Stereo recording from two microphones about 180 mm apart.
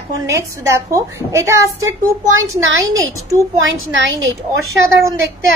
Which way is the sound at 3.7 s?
90° right.